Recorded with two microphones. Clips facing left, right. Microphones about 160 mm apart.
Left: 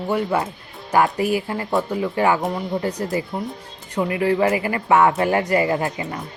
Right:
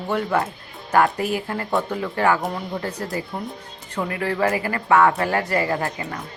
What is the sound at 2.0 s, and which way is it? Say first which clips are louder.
Speech: left 1 dB; 15° left (ahead or behind).